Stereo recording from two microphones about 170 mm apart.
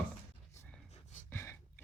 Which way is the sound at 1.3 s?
15° left (ahead or behind).